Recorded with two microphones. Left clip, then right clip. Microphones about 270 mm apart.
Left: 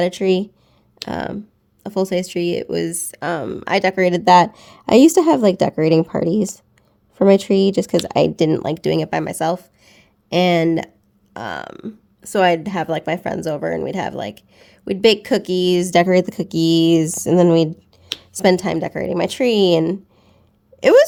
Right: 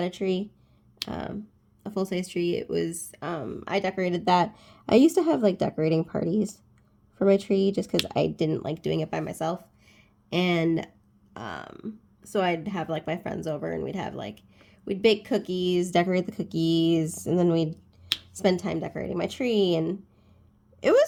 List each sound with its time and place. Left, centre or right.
0.0 s speech: left